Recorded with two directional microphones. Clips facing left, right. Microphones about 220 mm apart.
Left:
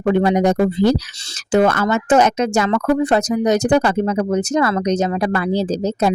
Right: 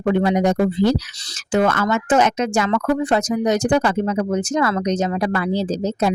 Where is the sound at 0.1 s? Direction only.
40° left (ahead or behind).